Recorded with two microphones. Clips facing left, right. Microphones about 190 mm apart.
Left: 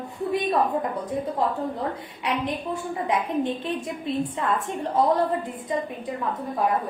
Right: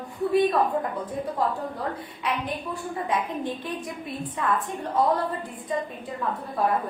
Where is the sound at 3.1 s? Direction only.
20° left (ahead or behind).